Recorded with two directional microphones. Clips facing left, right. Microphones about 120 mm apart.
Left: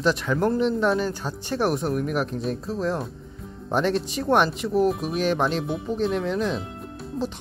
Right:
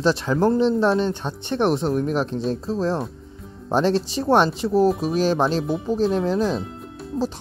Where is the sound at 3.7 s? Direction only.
30° right (ahead or behind).